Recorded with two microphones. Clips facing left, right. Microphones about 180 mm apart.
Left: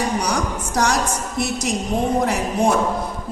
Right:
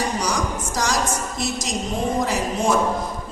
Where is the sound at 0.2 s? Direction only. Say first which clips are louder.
Left 2 dB; 60° left (ahead or behind).